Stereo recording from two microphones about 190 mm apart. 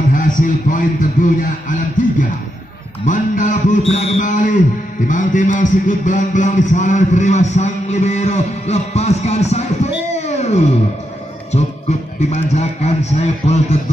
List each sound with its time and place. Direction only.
0.1 s a sound: 45° left (ahead or behind)
5.0 s a man's voice: 40° left (ahead or behind)
10.1 s music: 35° left (ahead or behind)
12.2 s a man's voice: 35° left (ahead or behind)